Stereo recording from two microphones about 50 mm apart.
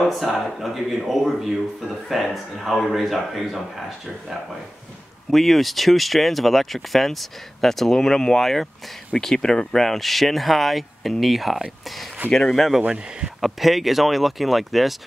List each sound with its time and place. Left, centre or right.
0.1 s speech: centre
5.3 s speech: centre
12.8 s speech: centre
13.4 s speech: centre